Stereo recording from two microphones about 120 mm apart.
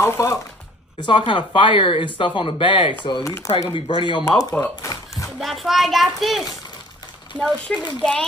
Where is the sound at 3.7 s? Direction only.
45° left (ahead or behind).